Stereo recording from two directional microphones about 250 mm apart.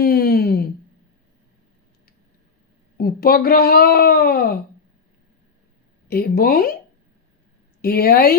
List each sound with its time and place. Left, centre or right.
0.0 s a sound: left
3.0 s speech: left
6.1 s speech: left
7.8 s speech: left